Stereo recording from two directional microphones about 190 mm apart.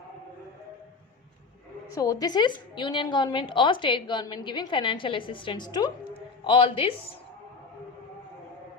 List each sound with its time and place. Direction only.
1.9 s a woman's voice: 20° left (ahead or behind)